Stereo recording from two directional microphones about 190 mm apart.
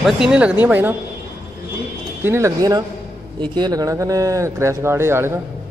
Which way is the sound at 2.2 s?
15° right (ahead or behind).